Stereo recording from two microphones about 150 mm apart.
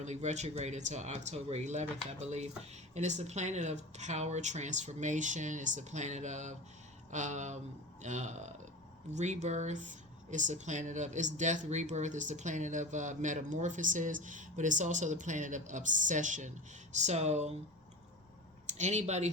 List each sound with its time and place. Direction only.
0.0 s speech: 50° right (ahead or behind)
18.7 s speech: 50° right (ahead or behind)